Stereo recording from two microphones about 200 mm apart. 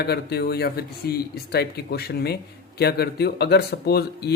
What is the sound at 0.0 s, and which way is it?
Speech, 55° left (ahead or behind).